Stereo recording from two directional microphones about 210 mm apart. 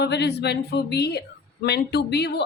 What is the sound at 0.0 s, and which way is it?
A woman's voice, 55° left (ahead or behind).